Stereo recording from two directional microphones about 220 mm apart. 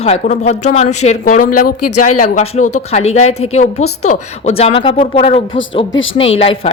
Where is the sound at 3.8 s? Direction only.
85° left.